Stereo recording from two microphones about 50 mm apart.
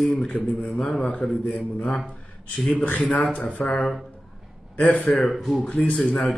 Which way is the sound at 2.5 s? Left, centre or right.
Left.